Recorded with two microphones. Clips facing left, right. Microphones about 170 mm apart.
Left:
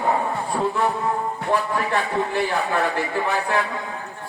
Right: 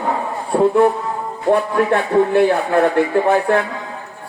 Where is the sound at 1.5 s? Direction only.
55° right (ahead or behind).